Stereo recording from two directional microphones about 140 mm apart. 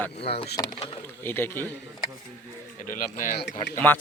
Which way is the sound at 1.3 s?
15° left (ahead or behind).